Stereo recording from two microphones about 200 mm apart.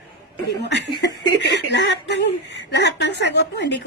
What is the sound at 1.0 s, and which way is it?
Speech, 60° left (ahead or behind).